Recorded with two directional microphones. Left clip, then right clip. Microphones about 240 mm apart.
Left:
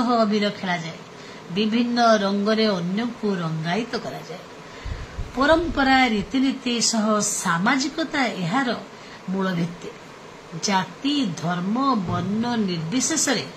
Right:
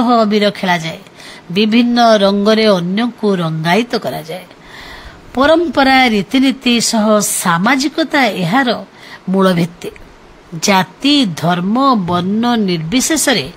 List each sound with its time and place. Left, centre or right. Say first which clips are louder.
0.0 s speech: right 9 dB; right
5.4 s speech: right 9 dB; right